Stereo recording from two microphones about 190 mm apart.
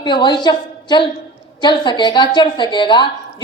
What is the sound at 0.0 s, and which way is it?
A woman's voice, 25° left (ahead or behind).